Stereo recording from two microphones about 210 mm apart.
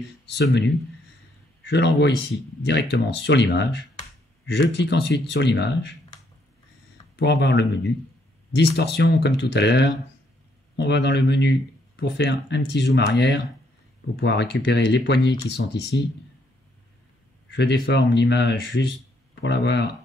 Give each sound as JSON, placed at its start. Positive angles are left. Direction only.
{"t": 0.3, "sound": "a man's voice", "side_deg": 55}
{"t": 1.7, "sound": "a man's voice", "side_deg": 55}
{"t": 7.2, "sound": "a man's voice", "side_deg": 55}
{"t": 14.2, "sound": "a man's voice", "side_deg": 55}
{"t": 17.5, "sound": "speech", "side_deg": 55}